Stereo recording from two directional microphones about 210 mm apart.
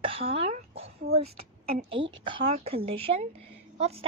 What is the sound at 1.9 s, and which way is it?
A woman's voice, 25° right (ahead or behind).